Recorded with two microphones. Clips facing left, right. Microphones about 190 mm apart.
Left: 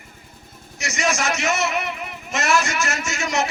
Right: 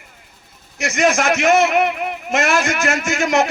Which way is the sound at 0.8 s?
55° right (ahead or behind).